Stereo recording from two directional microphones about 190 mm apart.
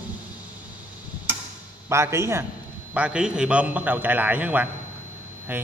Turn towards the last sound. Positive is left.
turn(degrees=-10)  # may be behind; listen again after turning